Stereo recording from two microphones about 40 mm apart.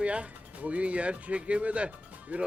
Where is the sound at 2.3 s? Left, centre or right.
Right.